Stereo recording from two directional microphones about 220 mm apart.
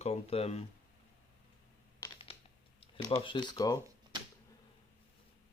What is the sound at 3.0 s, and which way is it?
Speech, 20° left (ahead or behind).